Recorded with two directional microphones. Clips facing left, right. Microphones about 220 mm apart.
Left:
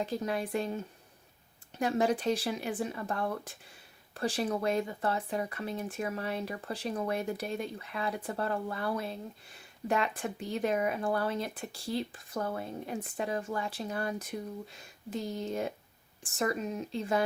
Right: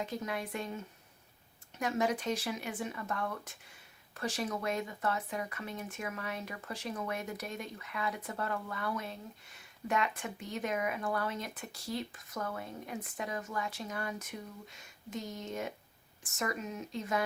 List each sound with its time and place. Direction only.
0.0 s speech: 35° left (ahead or behind)
1.8 s speech: 30° left (ahead or behind)